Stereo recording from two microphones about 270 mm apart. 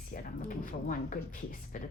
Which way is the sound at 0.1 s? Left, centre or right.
Left.